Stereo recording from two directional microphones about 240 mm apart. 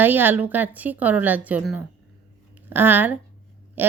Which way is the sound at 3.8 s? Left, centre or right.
Centre.